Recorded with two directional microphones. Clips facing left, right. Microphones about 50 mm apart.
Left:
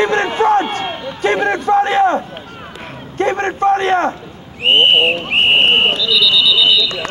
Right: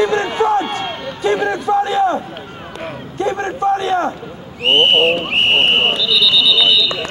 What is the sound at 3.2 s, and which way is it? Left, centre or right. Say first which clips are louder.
Speech: left 3 dB; left.